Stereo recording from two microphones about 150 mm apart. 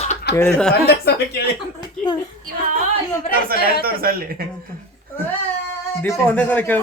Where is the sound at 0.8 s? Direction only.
90° left.